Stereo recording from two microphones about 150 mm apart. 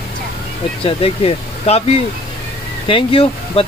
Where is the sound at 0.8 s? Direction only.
40° left (ahead or behind).